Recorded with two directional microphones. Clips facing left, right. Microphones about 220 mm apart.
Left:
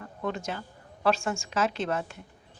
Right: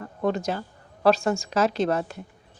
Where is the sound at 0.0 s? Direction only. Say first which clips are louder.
Right 7 dB; 40° right (ahead or behind).